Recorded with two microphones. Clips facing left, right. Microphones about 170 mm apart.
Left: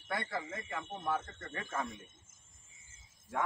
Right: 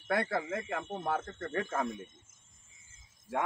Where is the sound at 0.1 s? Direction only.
70° right (ahead or behind).